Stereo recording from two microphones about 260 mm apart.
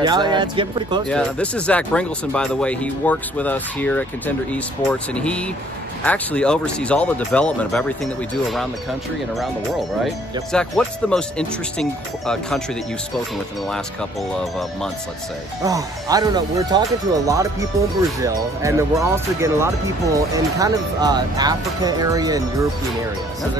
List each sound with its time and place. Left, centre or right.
0.0 s speech: centre
1.0 s speech: centre
10.5 s speech: centre
15.6 s speech: centre